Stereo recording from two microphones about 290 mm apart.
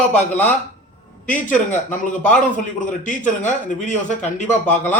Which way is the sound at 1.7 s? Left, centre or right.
Left.